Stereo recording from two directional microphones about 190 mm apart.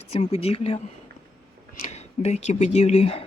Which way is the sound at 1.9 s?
35° left (ahead or behind).